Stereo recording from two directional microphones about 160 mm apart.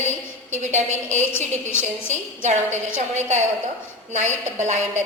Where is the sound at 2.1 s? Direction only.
45° right (ahead or behind).